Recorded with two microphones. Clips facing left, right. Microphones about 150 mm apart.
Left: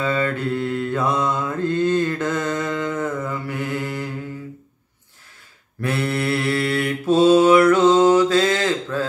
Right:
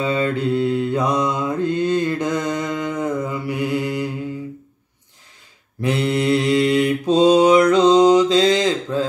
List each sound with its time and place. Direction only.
0.0 s mantra: 15° right (ahead or behind)
5.8 s mantra: 15° right (ahead or behind)